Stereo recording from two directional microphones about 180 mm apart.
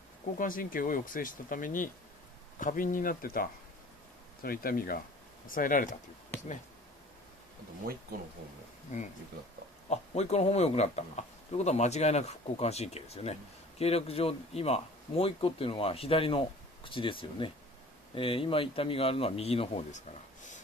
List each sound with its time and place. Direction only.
0.4 s speech: 50° left (ahead or behind)
8.9 s speech: 40° left (ahead or behind)